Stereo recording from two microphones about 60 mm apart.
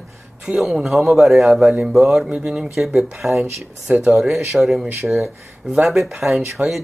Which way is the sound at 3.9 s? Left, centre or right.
Right.